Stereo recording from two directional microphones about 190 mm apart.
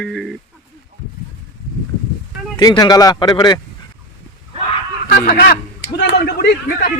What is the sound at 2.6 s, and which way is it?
Speech, 20° left (ahead or behind).